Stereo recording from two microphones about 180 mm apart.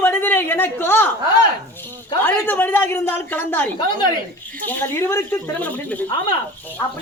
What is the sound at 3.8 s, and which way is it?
Speech, 25° left (ahead or behind).